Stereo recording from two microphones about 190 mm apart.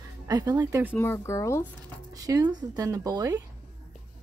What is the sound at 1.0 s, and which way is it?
Speech, 10° left (ahead or behind).